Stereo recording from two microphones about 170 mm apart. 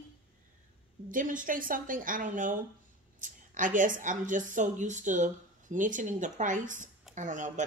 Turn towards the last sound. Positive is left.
turn(degrees=-45)  # may be behind; listen again after turning